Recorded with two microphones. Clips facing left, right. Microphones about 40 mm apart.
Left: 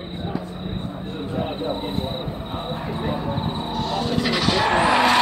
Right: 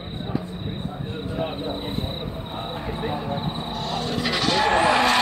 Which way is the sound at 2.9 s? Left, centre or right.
Centre.